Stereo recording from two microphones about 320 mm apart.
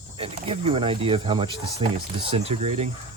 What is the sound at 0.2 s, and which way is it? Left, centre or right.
Speech, centre.